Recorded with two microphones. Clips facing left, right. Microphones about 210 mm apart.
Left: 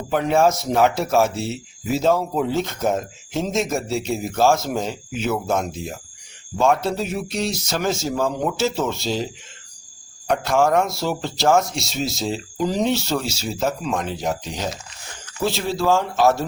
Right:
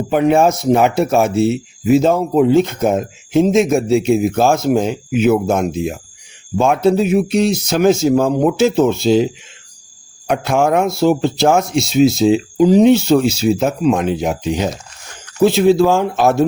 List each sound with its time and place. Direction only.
0.1 s speech: 60° right (ahead or behind)